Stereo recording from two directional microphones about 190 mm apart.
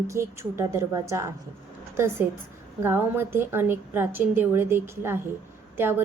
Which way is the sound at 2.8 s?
10° right (ahead or behind).